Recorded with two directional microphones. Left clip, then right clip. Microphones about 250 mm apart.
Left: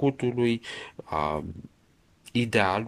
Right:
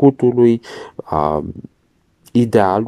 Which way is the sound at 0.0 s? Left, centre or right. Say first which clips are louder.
Right 14 dB; right.